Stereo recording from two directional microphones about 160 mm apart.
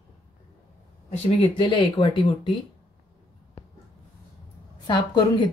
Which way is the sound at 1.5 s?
30° left (ahead or behind).